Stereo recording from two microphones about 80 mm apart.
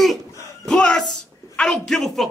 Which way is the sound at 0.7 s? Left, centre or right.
Centre.